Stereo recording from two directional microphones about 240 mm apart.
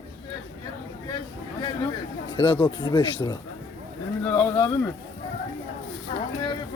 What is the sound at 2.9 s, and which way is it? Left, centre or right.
Speech, centre.